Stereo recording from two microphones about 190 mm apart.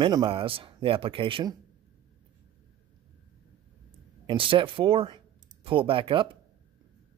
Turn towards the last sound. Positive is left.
turn(degrees=-25)  # may be behind; listen again after turning